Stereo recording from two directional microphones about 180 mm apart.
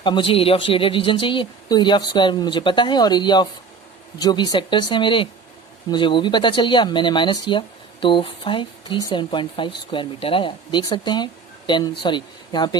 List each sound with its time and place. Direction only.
0.0 s speech: 25° left (ahead or behind)